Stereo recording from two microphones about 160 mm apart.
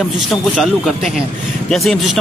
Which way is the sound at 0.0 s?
Centre (ahead or behind).